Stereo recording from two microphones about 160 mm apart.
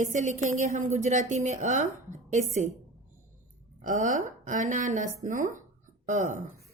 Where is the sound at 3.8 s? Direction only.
55° right (ahead or behind).